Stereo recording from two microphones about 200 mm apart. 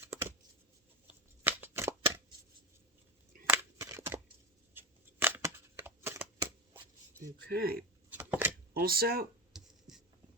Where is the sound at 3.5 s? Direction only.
15° right (ahead or behind).